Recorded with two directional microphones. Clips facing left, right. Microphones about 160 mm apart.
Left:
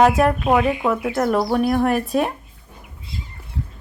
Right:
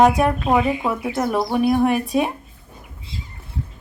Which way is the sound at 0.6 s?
5° right (ahead or behind).